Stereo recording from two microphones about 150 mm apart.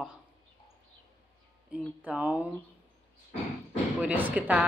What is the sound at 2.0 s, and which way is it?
Speech, 10° right (ahead or behind).